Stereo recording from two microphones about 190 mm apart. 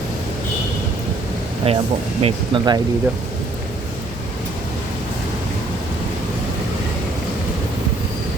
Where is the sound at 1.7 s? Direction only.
30° right (ahead or behind).